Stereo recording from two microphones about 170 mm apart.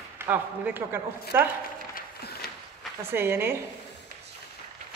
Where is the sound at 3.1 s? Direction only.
15° right (ahead or behind).